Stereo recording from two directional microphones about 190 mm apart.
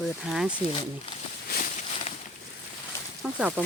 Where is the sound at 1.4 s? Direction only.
50° left (ahead or behind).